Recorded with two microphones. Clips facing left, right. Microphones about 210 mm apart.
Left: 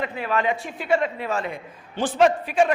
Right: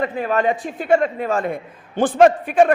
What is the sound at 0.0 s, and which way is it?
A man's voice, 45° right (ahead or behind).